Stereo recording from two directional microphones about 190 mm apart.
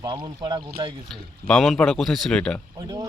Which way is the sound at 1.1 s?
5° left (ahead or behind).